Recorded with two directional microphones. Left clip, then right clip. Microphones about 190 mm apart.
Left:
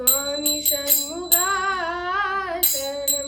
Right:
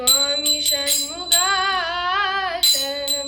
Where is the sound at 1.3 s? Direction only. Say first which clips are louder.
Right 4 dB; 55° left (ahead or behind).